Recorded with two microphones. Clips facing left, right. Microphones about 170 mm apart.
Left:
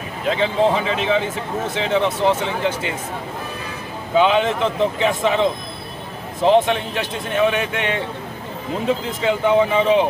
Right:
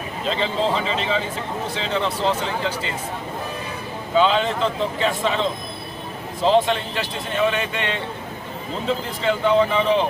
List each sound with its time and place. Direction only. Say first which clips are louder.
0.3 s a man's voice: left 5 dB; 15° left (ahead or behind)
4.2 s a man's voice: left 2 dB; 15° left (ahead or behind)
9.2 s a man's voice: left 2 dB; 15° left (ahead or behind)